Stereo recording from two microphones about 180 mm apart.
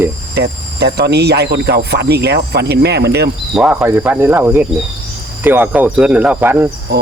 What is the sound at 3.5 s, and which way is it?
Speech, 5° right (ahead or behind).